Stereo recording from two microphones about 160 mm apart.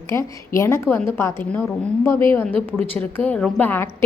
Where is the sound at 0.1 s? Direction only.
20° left (ahead or behind).